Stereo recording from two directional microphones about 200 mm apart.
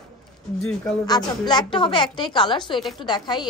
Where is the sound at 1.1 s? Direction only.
20° left (ahead or behind).